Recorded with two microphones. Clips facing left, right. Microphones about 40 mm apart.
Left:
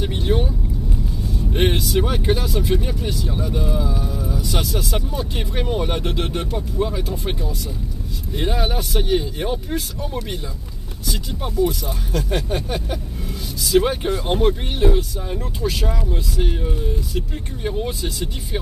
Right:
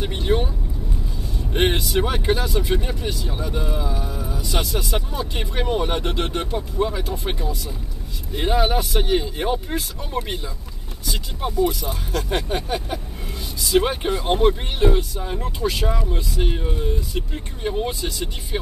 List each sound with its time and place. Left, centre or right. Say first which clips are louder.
0.0 s speech: even; centre
1.5 s speech: even; centre
11.1 s speech: even; centre